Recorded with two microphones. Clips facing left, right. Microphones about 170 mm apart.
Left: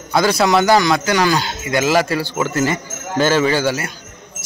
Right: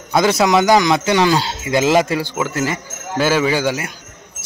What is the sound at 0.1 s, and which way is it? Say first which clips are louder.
A man's voice: right 1 dB; 20° right (ahead or behind).